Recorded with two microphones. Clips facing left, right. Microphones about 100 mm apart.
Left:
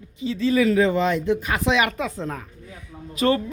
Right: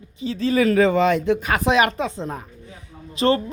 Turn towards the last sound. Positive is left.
turn(degrees=-30)  # may be behind; listen again after turning